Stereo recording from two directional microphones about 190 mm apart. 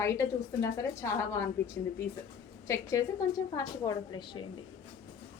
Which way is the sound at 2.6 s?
15° left (ahead or behind).